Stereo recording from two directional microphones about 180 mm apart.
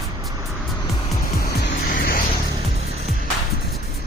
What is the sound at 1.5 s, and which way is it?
Music, 55° left (ahead or behind).